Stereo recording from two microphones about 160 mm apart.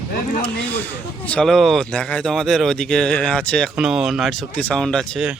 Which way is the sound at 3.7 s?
5° right (ahead or behind).